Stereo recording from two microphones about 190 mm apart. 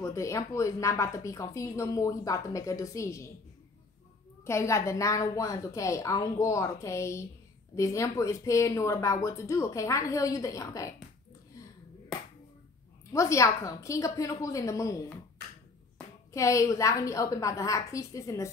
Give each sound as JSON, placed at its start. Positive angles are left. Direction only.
{"t": 0.0, "sound": "speech", "side_deg": 15}
{"t": 4.5, "sound": "speech", "side_deg": 15}
{"t": 13.1, "sound": "speech", "side_deg": 15}
{"t": 16.3, "sound": "speech", "side_deg": 15}